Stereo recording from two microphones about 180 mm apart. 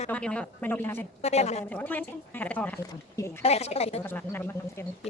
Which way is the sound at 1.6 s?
10° left (ahead or behind).